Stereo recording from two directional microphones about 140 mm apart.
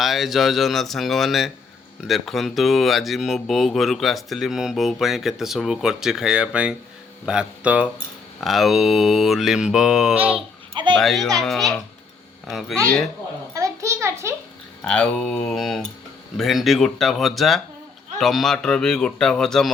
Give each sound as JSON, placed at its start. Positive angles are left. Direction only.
{"t": 0.0, "sound": "speech", "side_deg": 0}
{"t": 13.5, "sound": "a sound", "side_deg": -20}
{"t": 14.8, "sound": "speech", "side_deg": 10}